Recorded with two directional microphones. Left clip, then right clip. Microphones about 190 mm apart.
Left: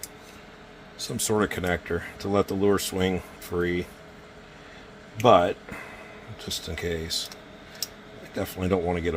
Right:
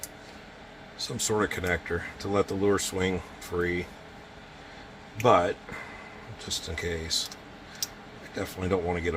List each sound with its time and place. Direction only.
0.9 s speech: 45° left (ahead or behind)
5.2 s speech: 40° left (ahead or behind)
8.4 s speech: 35° left (ahead or behind)